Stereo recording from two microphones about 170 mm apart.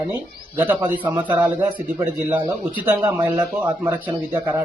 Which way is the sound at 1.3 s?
10° right (ahead or behind).